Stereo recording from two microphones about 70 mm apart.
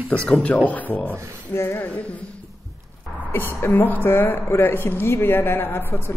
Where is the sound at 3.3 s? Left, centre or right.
Left.